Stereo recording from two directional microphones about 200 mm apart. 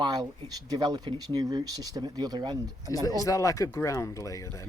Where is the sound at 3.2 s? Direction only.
15° left (ahead or behind).